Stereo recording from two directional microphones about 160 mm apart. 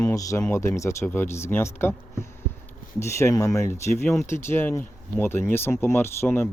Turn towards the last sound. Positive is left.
turn(degrees=15)  # may be behind; listen again after turning